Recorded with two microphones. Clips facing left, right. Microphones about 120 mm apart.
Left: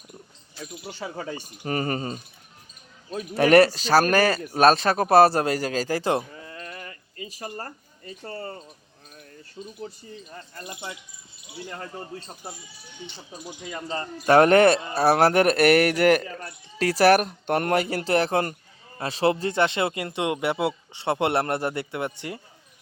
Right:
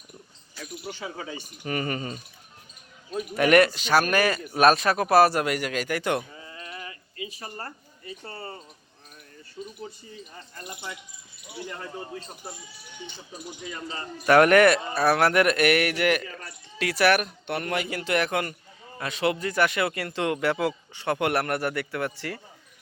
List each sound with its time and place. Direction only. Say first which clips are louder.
0.6 s speech: left 1 dB; 40° left (ahead or behind)
3.3 s speech: left 3 dB; 35° left (ahead or behind)
6.4 s a sound: left 1 dB; 55° left (ahead or behind)
13.8 s speech: left 1 dB; 35° left (ahead or behind)